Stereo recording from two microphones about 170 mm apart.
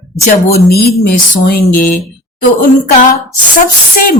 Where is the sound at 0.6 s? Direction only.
65° left (ahead or behind).